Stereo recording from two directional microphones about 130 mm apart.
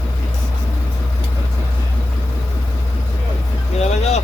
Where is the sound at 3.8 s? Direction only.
55° left (ahead or behind).